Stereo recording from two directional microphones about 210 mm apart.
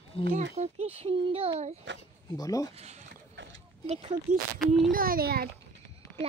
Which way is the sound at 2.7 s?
30° right (ahead or behind).